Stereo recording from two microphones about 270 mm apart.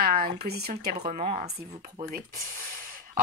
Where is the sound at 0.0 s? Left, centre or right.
Right.